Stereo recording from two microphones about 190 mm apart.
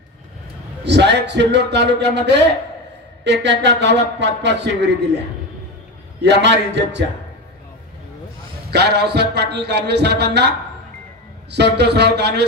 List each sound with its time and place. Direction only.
0.8 s speech: 65° right (ahead or behind)
6.2 s speech: 65° right (ahead or behind)
8.6 s speech: 60° right (ahead or behind)
11.5 s speech: 60° right (ahead or behind)